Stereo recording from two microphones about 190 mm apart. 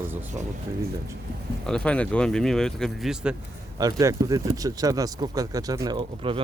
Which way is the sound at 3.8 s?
20° right (ahead or behind).